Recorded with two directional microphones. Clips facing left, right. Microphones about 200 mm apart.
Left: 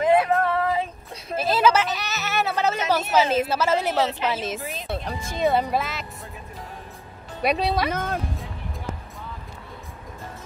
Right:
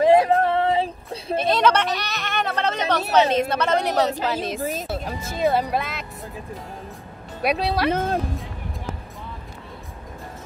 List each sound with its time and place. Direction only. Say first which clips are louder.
0.0 s a sound: right 3 dB; 30° right (ahead or behind)
1.4 s a sound: even; 5° left (ahead or behind)
3.0 s a woman's voice: right 5 dB; 35° right (ahead or behind)
3.3 s speech: right 1 dB; 5° left (ahead or behind)
7.4 s speech: right 1 dB; centre (ahead or behind)
7.9 s speech: right 5 dB; 30° right (ahead or behind)